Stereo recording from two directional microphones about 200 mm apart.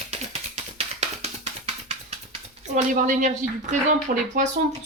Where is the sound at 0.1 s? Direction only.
30° right (ahead or behind).